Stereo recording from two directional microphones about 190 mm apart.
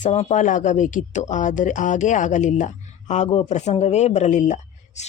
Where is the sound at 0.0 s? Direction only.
35° left (ahead or behind).